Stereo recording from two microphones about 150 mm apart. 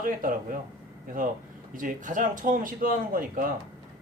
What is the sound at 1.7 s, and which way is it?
Speech, 60° right (ahead or behind).